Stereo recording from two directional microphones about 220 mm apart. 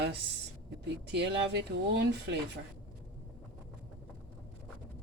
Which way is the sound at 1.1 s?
50° right (ahead or behind).